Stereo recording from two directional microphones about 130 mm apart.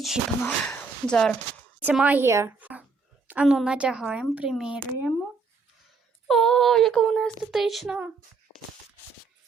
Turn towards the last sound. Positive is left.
turn(degrees=0)  # may be behind; listen again after turning